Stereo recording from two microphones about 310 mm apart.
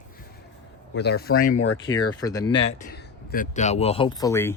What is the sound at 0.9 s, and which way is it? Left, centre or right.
Speech, left.